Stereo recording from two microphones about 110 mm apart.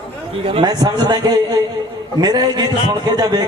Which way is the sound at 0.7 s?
40° right (ahead or behind).